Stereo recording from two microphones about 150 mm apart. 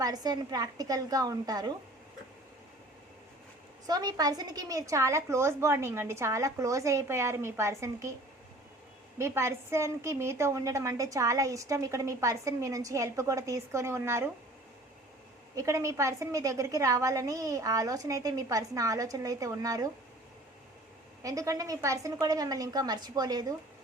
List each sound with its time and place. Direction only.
0.0 s a woman's voice: 25° right (ahead or behind)
3.8 s a woman's voice: 25° right (ahead or behind)
9.1 s a woman's voice: 20° right (ahead or behind)
15.5 s a woman's voice: 20° right (ahead or behind)
21.2 s a woman's voice: 20° right (ahead or behind)